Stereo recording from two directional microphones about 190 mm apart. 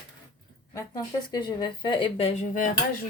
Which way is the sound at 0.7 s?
20° left (ahead or behind).